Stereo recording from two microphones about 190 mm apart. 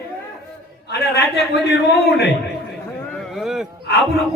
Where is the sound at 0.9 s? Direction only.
60° left (ahead or behind).